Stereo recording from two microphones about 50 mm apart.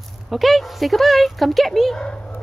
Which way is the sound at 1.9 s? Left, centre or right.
Left.